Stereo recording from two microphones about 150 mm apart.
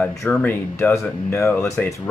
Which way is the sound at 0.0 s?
5° left (ahead or behind).